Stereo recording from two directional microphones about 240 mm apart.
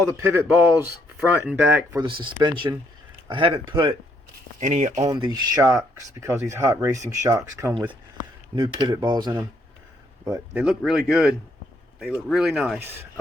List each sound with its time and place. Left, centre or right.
0.2 s speech: centre
4.6 s speech: right
5.0 s speech: centre
10.6 s speech: centre